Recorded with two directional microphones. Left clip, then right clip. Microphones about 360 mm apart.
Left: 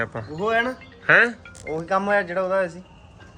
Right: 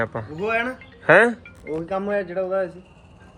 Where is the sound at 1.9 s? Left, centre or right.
Left.